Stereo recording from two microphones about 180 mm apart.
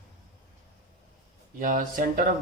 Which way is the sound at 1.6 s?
50° right (ahead or behind).